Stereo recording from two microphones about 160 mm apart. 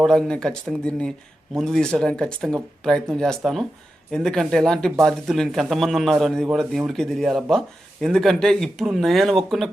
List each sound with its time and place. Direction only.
0.0 s speech: 5° left (ahead or behind)